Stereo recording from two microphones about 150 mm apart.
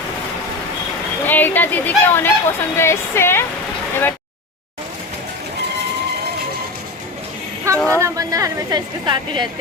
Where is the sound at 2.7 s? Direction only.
15° left (ahead or behind).